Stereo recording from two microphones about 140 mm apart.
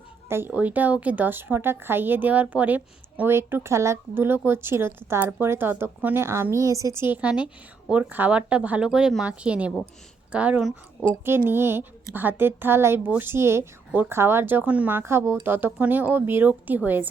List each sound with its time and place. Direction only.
0.3 s speech: 15° right (ahead or behind)
11.3 s speech: 15° right (ahead or behind)